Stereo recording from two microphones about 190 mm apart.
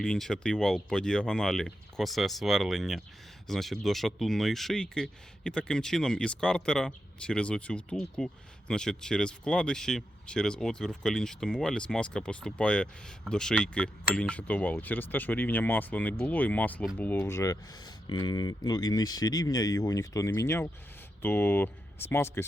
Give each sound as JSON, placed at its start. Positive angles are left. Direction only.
{"t": 0.0, "sound": "speech", "side_deg": 5}